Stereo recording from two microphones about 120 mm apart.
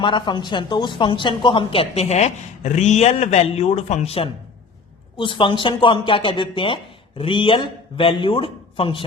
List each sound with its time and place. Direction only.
0.0 s a woman's voice: 40° left (ahead or behind); by 4.3 s 60° left (ahead or behind)
5.1 s a woman's voice: 45° left (ahead or behind)